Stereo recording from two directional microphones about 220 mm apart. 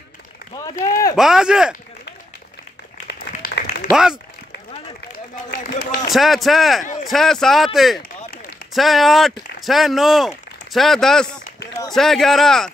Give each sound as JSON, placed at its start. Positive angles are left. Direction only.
{"t": 0.8, "sound": "speech", "side_deg": 15}
{"t": 1.1, "sound": "speech", "side_deg": 0}
{"t": 3.1, "sound": "applause", "side_deg": 50}
{"t": 3.9, "sound": "speech", "side_deg": -5}
{"t": 5.5, "sound": "a sound", "side_deg": 45}
{"t": 6.0, "sound": "speech", "side_deg": 0}